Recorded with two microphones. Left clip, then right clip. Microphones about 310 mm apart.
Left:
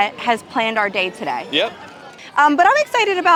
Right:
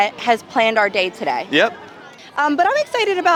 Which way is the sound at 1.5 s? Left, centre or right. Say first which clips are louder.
Right 4 dB; right.